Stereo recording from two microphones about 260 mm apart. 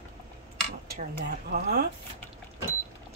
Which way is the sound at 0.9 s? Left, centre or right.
Right.